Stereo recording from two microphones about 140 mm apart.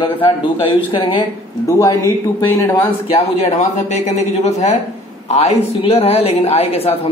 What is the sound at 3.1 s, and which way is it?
A man's voice, 45° left (ahead or behind).